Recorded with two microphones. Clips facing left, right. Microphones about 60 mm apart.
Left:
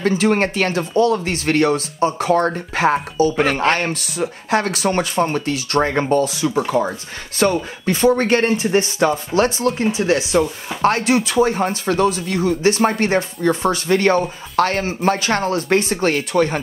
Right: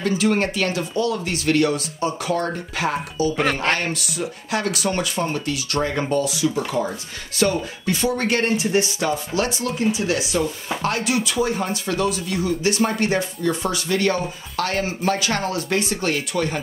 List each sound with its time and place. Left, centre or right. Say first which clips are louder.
0.0 s speech: left 3 dB; left